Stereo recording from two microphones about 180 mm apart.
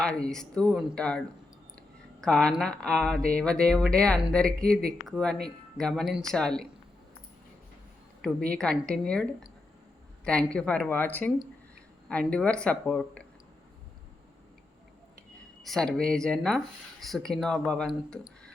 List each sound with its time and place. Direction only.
0.0 s speech: 5° left (ahead or behind)
2.2 s speech: 5° left (ahead or behind)
8.9 s speech: 5° left (ahead or behind)
10.2 s speech: 5° left (ahead or behind)
15.6 s speech: 5° left (ahead or behind)